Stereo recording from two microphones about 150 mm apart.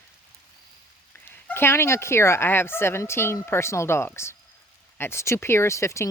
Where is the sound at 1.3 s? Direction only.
15° left (ahead or behind).